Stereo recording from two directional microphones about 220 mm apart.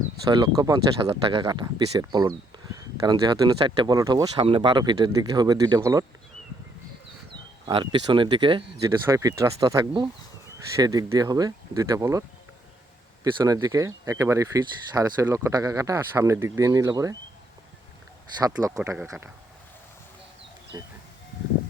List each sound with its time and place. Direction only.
0.3 s speech: 20° right (ahead or behind)
7.7 s speech: 20° right (ahead or behind)
13.4 s speech: 15° right (ahead or behind)
18.5 s speech: 15° right (ahead or behind)
18.8 s speech: 5° right (ahead or behind)
20.7 s speech: 15° right (ahead or behind)